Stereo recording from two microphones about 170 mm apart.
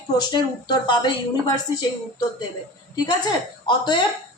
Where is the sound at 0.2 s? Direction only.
25° left (ahead or behind).